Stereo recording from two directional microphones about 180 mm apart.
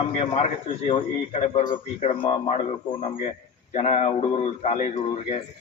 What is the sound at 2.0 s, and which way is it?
Speech, 30° left (ahead or behind).